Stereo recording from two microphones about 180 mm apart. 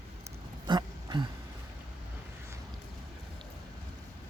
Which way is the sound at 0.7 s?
25° right (ahead or behind).